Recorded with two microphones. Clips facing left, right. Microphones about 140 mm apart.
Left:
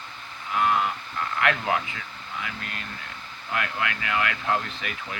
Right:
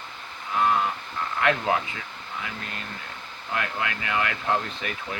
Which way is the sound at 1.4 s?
25° right (ahead or behind).